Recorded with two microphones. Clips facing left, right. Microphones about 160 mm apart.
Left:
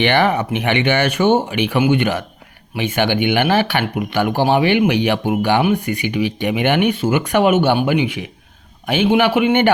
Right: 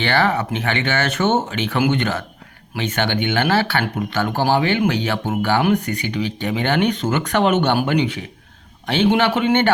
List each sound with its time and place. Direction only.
0.0 s speech: 15° left (ahead or behind)